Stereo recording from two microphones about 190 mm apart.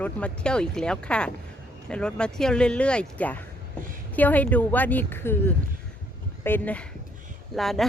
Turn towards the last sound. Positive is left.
turn(degrees=0)  # may be behind; listen again after turning